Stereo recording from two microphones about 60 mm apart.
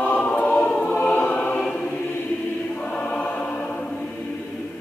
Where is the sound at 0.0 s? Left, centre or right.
Left.